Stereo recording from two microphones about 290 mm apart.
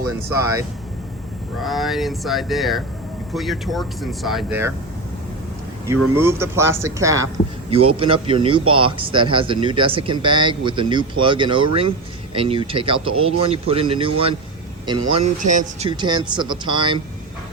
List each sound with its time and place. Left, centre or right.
0.3 s speech: centre
1.6 s speech: centre
6.1 s speech: centre